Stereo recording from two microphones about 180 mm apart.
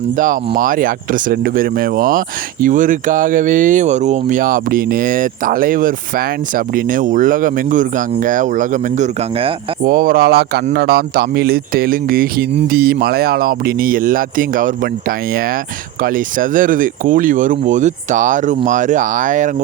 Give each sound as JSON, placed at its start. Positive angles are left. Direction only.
{"t": 0.2, "sound": "speech", "side_deg": -50}
{"t": 16.0, "sound": "speech", "side_deg": -50}